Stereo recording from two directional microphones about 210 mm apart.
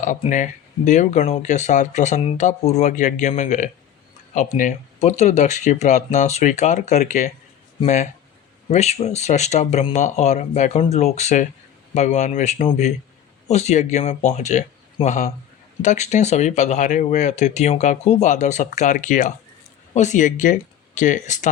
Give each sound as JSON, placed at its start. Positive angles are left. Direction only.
{"t": 0.0, "sound": "speech", "side_deg": 35}